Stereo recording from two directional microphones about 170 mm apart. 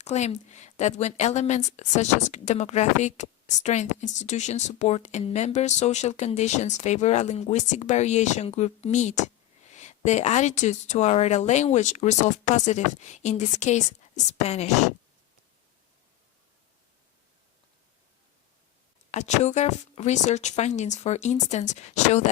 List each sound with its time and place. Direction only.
0.0 s a woman's voice: 40° left (ahead or behind)
19.1 s a woman's voice: 40° left (ahead or behind)